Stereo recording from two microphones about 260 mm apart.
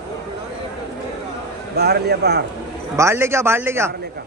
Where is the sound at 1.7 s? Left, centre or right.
Right.